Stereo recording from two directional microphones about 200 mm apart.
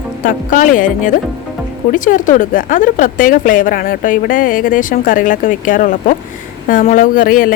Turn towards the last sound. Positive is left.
turn(degrees=45)  # may be behind; listen again after turning